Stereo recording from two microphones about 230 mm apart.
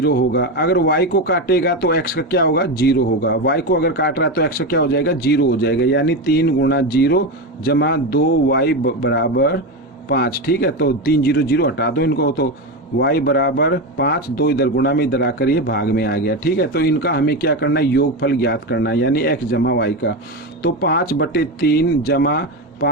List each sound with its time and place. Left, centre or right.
0.0 s speech: left